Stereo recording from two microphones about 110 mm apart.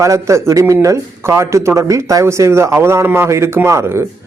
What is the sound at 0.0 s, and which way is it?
Speech, 25° right (ahead or behind).